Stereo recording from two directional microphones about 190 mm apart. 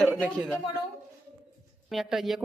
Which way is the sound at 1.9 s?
Centre (ahead or behind).